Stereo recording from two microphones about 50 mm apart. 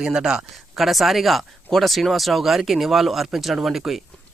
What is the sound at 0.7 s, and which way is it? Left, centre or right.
Speech, centre.